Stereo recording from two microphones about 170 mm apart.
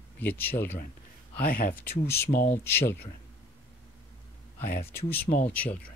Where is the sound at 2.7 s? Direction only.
15° left (ahead or behind).